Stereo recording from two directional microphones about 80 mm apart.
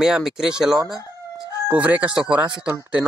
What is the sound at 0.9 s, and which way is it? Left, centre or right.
Speech, left.